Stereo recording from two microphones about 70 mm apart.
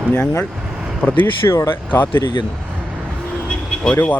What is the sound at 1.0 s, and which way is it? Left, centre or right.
Speech, centre.